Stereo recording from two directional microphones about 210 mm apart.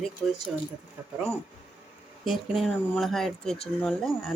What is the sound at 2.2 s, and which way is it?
Speech, centre (ahead or behind).